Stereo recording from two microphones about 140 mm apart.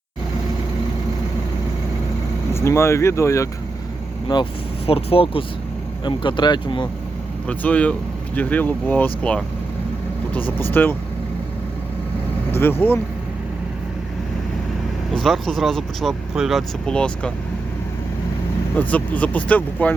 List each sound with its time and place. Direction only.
2.5 s speech: 20° left (ahead or behind)
4.9 s speech: 45° left (ahead or behind)
7.4 s speech: 10° left (ahead or behind)
12.5 s speech: 15° left (ahead or behind)
15.1 s speech: centre (ahead or behind)
18.8 s speech: 10° left (ahead or behind)